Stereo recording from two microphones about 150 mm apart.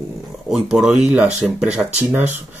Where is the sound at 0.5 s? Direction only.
Centre (ahead or behind).